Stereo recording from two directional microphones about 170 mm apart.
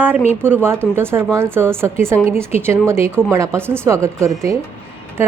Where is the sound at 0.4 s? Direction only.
15° right (ahead or behind).